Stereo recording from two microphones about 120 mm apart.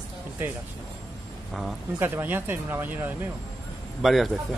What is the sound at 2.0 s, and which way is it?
Speech, 15° right (ahead or behind).